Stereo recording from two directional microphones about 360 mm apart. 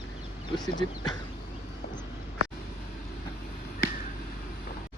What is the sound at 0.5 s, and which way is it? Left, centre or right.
Speech, centre.